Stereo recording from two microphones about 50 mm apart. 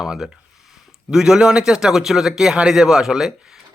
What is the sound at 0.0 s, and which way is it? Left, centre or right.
A man's voice, centre.